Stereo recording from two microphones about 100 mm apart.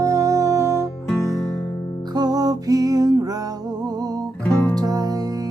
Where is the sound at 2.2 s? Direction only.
40° right (ahead or behind).